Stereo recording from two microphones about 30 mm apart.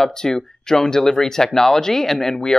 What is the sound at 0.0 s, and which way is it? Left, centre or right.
Speech, centre.